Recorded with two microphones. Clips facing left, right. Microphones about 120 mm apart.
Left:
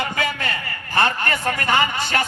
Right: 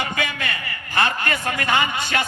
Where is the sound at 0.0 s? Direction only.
35° left (ahead or behind).